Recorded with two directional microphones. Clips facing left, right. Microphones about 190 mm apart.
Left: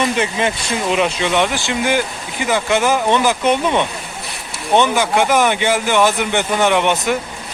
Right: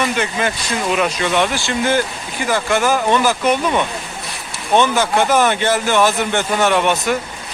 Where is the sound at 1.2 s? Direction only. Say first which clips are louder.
Even; 15° left (ahead or behind).